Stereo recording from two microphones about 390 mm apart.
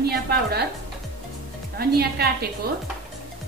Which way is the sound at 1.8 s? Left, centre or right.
Right.